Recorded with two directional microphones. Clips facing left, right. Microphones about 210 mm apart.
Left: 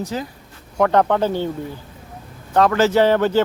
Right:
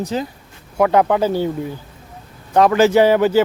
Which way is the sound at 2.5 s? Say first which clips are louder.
Right 3 dB; 15° right (ahead or behind).